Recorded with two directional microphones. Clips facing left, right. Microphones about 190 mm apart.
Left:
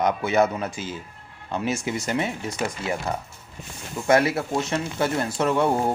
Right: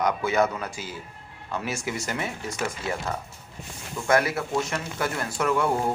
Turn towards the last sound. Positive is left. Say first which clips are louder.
# left 3 dB
turn(degrees=25)  # may be behind; listen again after turning